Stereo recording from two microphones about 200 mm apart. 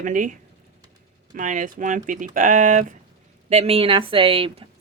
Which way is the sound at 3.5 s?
30° right (ahead or behind).